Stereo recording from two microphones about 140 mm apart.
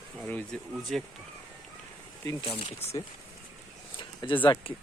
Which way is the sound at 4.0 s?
35° left (ahead or behind).